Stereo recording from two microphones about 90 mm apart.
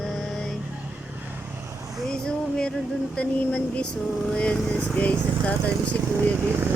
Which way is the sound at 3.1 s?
10° left (ahead or behind).